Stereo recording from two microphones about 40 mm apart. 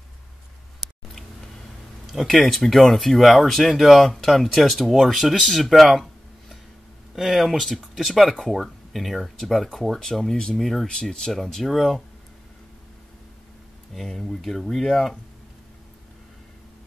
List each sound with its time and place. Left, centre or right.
2.2 s speech: centre
7.2 s speech: centre
10.9 s speech: centre
11.6 s speech: centre
13.9 s speech: centre